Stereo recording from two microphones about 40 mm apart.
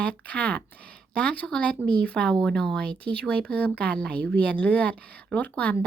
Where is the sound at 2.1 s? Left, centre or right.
Centre.